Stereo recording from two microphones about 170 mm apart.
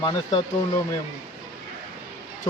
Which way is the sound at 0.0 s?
25° left (ahead or behind).